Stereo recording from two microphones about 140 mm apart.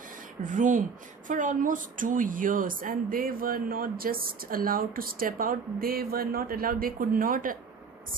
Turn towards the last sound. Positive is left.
turn(degrees=-85)